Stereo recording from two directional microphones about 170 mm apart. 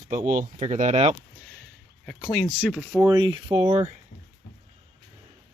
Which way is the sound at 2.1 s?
15° left (ahead or behind).